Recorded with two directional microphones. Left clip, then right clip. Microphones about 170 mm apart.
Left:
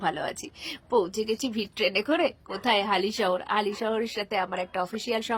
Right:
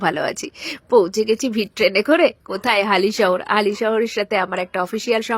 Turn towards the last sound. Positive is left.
turn(degrees=-20)  # may be behind; listen again after turning